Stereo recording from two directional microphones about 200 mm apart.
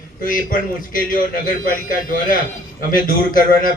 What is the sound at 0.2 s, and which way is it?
A man's voice, 40° left (ahead or behind).